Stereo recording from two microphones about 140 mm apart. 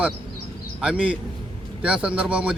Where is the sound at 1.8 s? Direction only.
10° right (ahead or behind).